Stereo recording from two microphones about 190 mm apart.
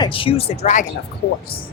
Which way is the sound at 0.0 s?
30° left (ahead or behind).